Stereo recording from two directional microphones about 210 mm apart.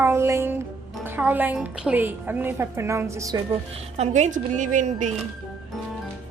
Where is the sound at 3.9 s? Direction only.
30° right (ahead or behind).